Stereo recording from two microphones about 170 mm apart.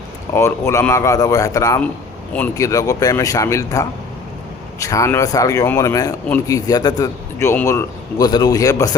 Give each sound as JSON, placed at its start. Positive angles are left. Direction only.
{"t": 0.3, "sound": "a man's voice", "side_deg": 15}